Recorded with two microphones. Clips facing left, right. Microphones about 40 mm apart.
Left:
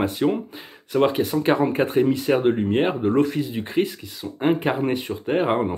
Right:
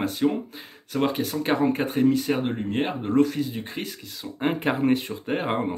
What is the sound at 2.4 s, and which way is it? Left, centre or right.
Speech, left.